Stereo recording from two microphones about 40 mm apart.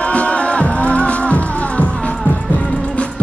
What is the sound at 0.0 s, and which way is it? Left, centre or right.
Music, left.